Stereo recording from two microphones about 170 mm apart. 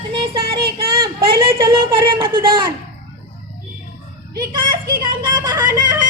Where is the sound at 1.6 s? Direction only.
30° right (ahead or behind).